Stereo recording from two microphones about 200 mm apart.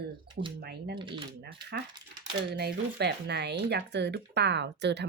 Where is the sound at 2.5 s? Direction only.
55° right (ahead or behind).